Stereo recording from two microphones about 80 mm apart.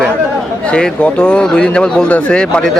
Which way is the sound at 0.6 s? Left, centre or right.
Centre.